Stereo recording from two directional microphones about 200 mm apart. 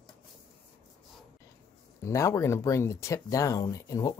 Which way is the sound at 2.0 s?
15° left (ahead or behind).